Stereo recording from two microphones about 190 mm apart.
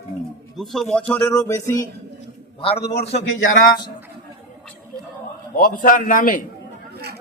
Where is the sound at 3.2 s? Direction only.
90° left.